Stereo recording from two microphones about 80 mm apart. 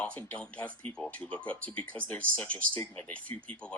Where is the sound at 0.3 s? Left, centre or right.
Centre.